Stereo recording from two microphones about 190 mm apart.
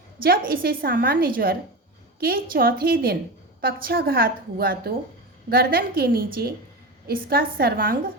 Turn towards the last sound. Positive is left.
turn(degrees=-50)  # may be behind; listen again after turning